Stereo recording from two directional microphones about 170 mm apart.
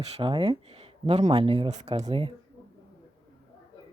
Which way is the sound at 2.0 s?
30° right (ahead or behind).